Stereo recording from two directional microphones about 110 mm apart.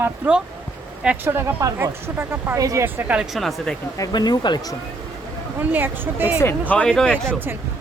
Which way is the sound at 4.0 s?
40° left (ahead or behind).